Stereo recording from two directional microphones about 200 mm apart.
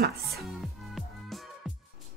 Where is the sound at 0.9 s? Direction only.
Centre (ahead or behind).